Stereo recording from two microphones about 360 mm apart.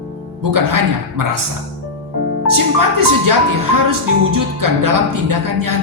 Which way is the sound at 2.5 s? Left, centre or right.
Right.